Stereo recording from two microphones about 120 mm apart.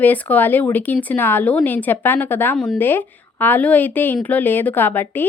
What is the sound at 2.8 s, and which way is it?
A woman's voice, 15° left (ahead or behind).